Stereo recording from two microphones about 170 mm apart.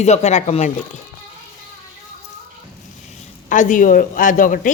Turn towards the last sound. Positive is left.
turn(degrees=50)  # may be behind; listen again after turning